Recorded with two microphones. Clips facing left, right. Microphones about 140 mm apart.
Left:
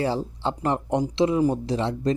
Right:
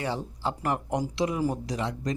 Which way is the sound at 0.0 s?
30° left (ahead or behind).